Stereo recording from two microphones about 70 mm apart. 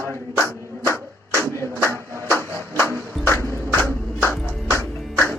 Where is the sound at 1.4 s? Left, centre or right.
Left.